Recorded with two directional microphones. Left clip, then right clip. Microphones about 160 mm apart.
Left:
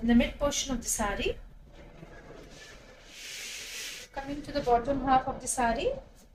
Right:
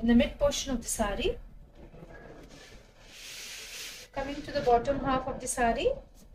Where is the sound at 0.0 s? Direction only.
10° right (ahead or behind).